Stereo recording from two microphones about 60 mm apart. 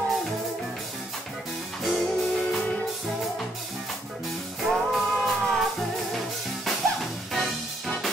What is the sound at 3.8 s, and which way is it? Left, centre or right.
Music, centre.